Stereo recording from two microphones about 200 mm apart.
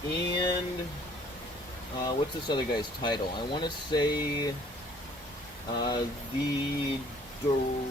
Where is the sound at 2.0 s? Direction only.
20° left (ahead or behind).